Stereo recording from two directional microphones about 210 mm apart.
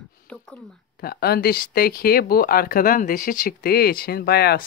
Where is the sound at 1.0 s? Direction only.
45° left (ahead or behind).